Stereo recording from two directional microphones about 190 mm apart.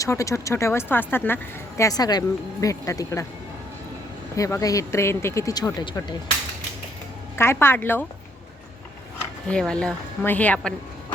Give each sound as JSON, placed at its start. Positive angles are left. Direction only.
{"t": 0.0, "sound": "speech", "side_deg": 15}
{"t": 4.4, "sound": "speech", "side_deg": 15}
{"t": 7.3, "sound": "speech", "side_deg": 10}
{"t": 9.5, "sound": "a woman's voice", "side_deg": 5}